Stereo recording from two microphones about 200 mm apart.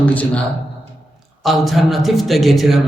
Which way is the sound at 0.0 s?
5° left (ahead or behind).